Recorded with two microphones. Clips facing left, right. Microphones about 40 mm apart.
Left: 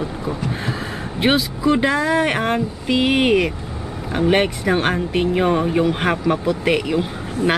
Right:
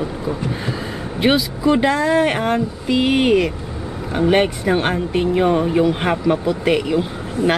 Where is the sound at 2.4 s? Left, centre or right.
Centre.